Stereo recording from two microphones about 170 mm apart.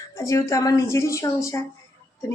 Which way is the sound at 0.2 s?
20° left (ahead or behind).